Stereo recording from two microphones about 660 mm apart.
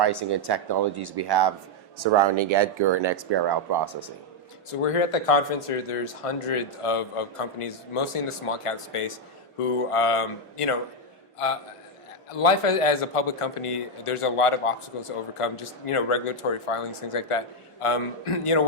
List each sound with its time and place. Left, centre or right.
0.0 s speech: right
4.7 s a man's voice: left
12.4 s a man's voice: left